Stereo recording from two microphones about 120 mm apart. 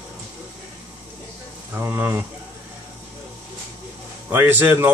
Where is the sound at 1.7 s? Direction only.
15° right (ahead or behind).